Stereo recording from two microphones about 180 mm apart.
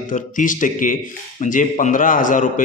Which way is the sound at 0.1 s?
45° left (ahead or behind).